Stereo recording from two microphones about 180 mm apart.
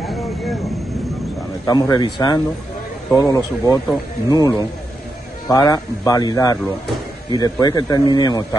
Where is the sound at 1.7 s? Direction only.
20° left (ahead or behind).